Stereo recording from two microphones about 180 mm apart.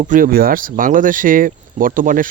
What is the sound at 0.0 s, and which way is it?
Speech, 50° right (ahead or behind).